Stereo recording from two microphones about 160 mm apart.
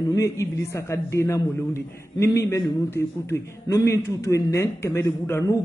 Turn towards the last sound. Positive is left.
turn(degrees=20)  # may be behind; listen again after turning